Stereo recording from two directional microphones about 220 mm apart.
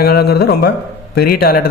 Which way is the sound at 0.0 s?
45° left (ahead or behind).